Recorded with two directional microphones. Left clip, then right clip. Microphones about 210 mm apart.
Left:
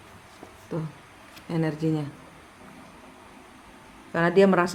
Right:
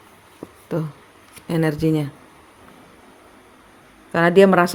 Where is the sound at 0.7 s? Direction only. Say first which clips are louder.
Right 8 dB; 35° right (ahead or behind).